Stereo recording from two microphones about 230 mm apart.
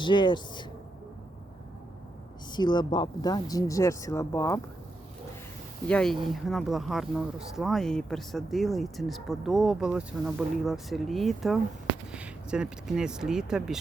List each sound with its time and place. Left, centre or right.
0.0 s speech: centre
2.5 s speech: centre
5.9 s speech: centre